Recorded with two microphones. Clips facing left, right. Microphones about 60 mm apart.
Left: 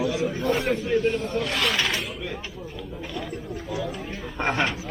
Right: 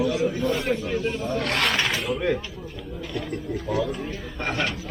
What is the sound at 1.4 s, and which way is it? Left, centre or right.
Speech, right.